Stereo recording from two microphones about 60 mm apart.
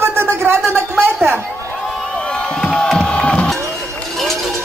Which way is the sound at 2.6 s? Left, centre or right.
Centre.